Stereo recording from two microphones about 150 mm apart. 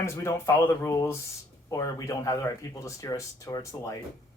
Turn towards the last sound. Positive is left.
turn(degrees=20)  # may be behind; listen again after turning